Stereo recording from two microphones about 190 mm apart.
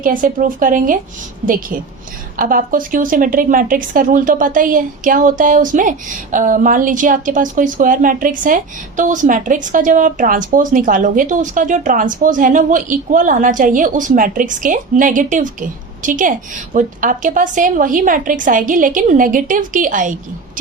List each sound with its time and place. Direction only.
0.0 s a woman's voice: 45° right (ahead or behind)